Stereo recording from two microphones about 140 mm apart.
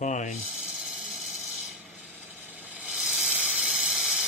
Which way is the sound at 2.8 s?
5° right (ahead or behind).